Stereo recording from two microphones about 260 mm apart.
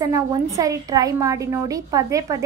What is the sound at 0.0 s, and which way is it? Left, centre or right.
A woman's voice, centre.